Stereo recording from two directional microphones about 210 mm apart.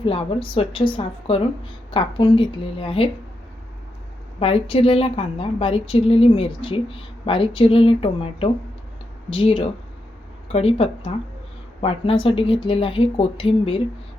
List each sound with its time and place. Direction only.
0.0 s a woman's voice: 25° left (ahead or behind)
4.4 s a woman's voice: 25° left (ahead or behind)